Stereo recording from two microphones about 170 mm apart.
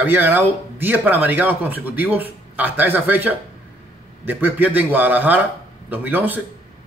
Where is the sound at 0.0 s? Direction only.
10° right (ahead or behind).